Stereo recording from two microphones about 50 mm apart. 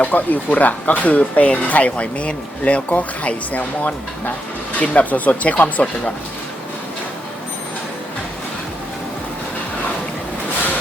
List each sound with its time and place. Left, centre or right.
0.0 s speech: left